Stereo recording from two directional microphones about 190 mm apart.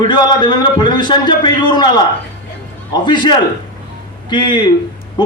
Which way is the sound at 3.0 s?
25° left (ahead or behind).